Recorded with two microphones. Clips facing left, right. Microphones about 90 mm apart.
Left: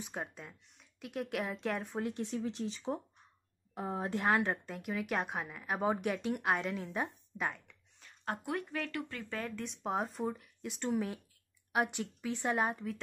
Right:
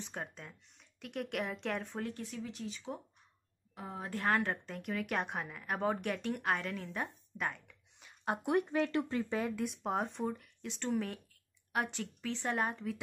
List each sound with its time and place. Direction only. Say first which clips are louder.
0.0 s speech: left 2 dB; 5° left (ahead or behind)
2.0 s a woman's voice: left 3 dB; 15° left (ahead or behind)
2.2 s speech: left 5 dB; 30° left (ahead or behind)
4.1 s a woman's voice: left 1 dB; 15° left (ahead or behind)
8.0 s a woman's voice: right 3 dB; 20° right (ahead or behind); by 12.9 s 5° left (ahead or behind)